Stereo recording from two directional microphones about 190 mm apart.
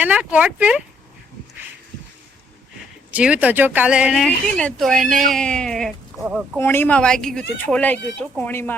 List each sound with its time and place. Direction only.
0.0 s speech: 5° right (ahead or behind)
3.1 s speech: 5° right (ahead or behind)
6.6 s speech: 10° left (ahead or behind)